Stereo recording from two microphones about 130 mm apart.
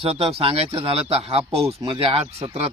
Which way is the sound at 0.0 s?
50° right (ahead or behind).